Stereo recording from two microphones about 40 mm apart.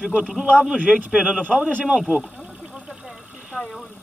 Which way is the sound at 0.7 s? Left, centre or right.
Right.